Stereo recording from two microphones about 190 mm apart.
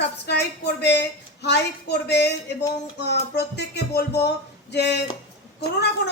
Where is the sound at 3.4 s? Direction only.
60° left (ahead or behind).